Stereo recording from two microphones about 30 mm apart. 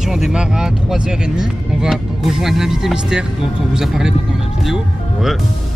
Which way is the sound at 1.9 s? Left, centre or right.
Centre.